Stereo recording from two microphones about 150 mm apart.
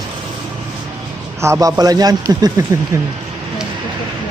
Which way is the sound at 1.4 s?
20° right (ahead or behind).